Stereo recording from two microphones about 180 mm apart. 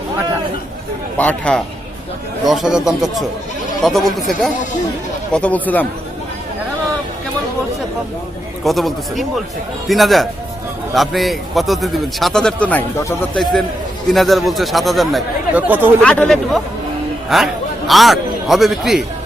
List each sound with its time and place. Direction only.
1.2 s speech: 5° left (ahead or behind)
8.6 s speech: centre (ahead or behind)
14.1 s speech: centre (ahead or behind)
16.0 s a man's voice: 5° left (ahead or behind)